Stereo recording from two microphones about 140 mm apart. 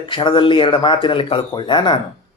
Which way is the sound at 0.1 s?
35° left (ahead or behind).